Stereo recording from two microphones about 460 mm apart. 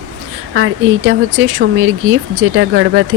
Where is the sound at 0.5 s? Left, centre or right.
Right.